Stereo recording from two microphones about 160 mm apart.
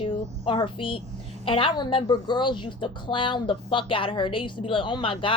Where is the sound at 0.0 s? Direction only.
35° left (ahead or behind).